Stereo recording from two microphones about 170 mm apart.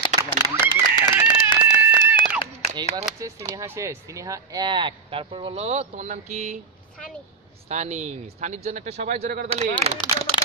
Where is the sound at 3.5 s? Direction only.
20° right (ahead or behind); by 6.6 s 45° right (ahead or behind).